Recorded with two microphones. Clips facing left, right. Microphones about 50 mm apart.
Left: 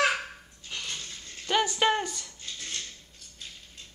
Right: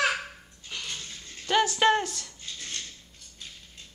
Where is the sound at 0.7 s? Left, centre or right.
Centre.